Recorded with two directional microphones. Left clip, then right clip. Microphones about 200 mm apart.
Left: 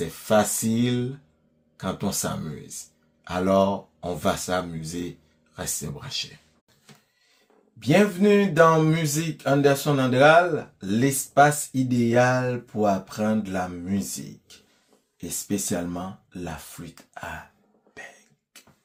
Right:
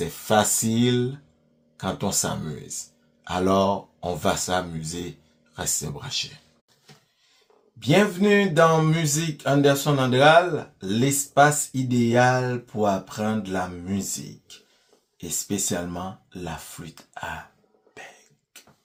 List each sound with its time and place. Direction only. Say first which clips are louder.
0.0 s speech: even; 15° right (ahead or behind)
7.8 s speech: even; 10° right (ahead or behind)
15.9 s speech: right 1 dB; 10° right (ahead or behind)